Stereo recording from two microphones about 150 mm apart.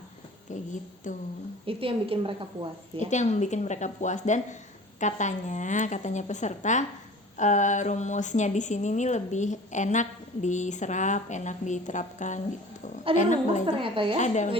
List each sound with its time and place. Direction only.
1.1 s a woman's voice: 55° left (ahead or behind)
1.6 s a woman's voice: 40° right (ahead or behind)
3.1 s speech: 50° left (ahead or behind)
13.7 s a woman's voice: 35° right (ahead or behind)
14.2 s speech: 50° left (ahead or behind)